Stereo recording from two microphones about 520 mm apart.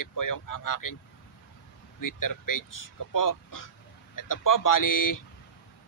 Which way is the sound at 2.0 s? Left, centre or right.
Left.